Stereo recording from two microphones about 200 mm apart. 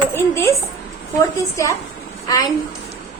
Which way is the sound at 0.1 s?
15° left (ahead or behind).